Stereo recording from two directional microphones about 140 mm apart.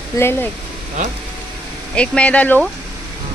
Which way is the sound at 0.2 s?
15° left (ahead or behind).